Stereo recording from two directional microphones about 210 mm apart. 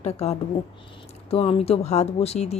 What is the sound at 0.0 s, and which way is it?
Speech, 30° left (ahead or behind).